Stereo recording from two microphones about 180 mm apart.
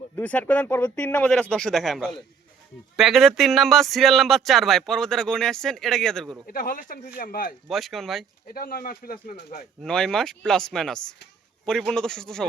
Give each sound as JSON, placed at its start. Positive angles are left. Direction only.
{"t": 0.2, "sound": "speech", "side_deg": 10}
{"t": 6.5, "sound": "speech", "side_deg": 55}
{"t": 7.7, "sound": "speech", "side_deg": 0}
{"t": 8.5, "sound": "speech", "side_deg": 55}
{"t": 9.8, "sound": "speech", "side_deg": 5}